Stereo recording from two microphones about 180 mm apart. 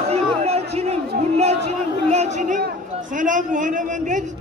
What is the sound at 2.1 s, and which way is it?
A man's voice, 40° right (ahead or behind).